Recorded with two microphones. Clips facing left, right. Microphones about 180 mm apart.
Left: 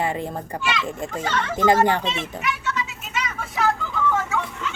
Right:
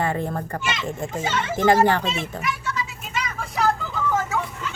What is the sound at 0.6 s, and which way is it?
Speech, 20° right (ahead or behind).